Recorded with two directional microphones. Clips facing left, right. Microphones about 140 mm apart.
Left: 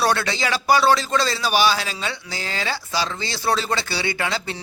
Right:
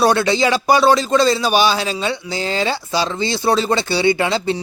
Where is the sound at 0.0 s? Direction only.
20° right (ahead or behind).